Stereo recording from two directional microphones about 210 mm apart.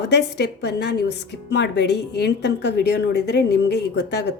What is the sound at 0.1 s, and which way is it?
A woman's voice, 50° left (ahead or behind).